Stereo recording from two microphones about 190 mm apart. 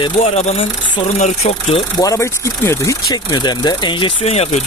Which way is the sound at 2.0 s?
15° left (ahead or behind).